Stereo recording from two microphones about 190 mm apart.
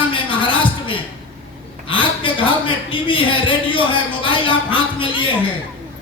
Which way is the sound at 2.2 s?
25° left (ahead or behind).